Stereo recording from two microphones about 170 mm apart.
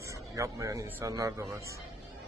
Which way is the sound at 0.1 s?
20° right (ahead or behind).